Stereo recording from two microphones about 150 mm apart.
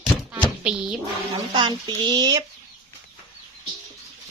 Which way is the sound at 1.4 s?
30° right (ahead or behind).